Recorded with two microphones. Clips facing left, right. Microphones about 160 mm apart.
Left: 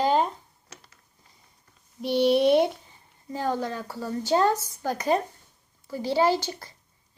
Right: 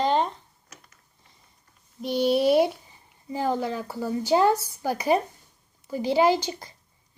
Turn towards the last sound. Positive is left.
turn(degrees=-15)  # may be behind; listen again after turning